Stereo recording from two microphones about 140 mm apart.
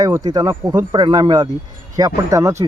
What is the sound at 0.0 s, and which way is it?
Speech, 30° right (ahead or behind).